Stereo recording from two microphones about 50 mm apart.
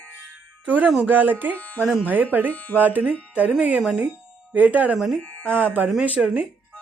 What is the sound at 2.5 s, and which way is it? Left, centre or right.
Speech, left.